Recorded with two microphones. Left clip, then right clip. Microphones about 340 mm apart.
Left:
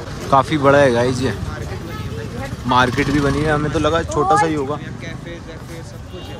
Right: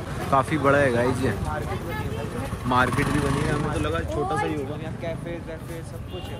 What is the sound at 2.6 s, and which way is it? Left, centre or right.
Speech, centre.